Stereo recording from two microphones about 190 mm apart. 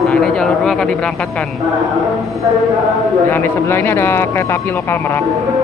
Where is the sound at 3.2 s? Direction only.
10° left (ahead or behind).